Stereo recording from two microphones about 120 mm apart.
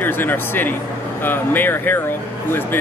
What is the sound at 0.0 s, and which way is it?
Speech, 15° left (ahead or behind).